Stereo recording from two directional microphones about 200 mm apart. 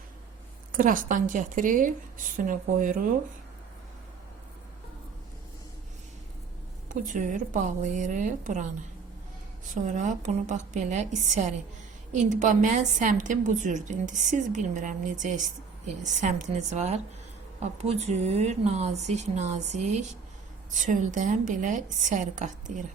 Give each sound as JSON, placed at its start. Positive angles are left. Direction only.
{"t": 0.7, "sound": "a woman's voice", "side_deg": -40}
{"t": 6.8, "sound": "a woman's voice", "side_deg": -40}
{"t": 9.8, "sound": "a woman's voice", "side_deg": -40}